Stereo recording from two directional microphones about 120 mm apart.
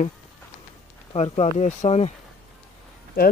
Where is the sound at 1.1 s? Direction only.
60° left (ahead or behind).